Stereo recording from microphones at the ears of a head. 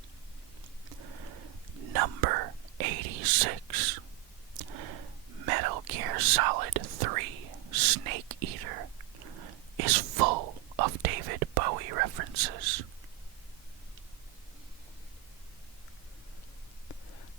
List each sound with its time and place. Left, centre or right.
0.9 s whispering: right